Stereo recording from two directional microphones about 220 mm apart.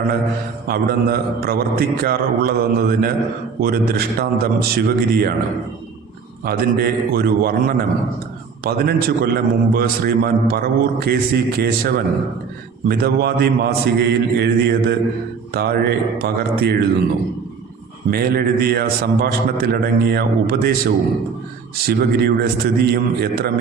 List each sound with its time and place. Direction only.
0.7 s a man's voice: 45° right (ahead or behind)
6.4 s a man's voice: 45° right (ahead or behind)
18.1 s a man's voice: 45° right (ahead or behind)